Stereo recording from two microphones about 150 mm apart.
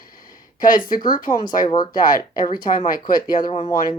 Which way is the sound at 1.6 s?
30° left (ahead or behind).